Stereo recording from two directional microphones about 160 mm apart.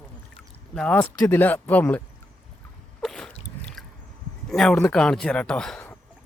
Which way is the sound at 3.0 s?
5° left (ahead or behind).